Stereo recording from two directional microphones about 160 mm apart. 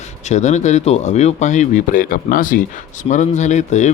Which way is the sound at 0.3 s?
45° left (ahead or behind).